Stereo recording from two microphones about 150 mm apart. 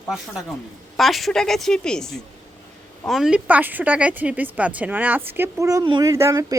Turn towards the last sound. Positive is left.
turn(degrees=-20)  # may be behind; listen again after turning